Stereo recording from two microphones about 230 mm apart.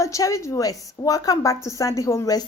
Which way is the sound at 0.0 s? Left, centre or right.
Centre.